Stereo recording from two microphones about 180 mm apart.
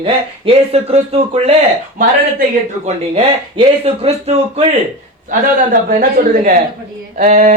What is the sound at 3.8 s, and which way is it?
Speech, 35° right (ahead or behind).